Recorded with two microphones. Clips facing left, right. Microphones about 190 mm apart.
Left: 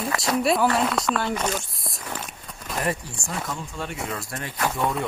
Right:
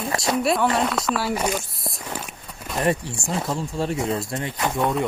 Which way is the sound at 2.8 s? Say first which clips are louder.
Right 6 dB; 25° right (ahead or behind).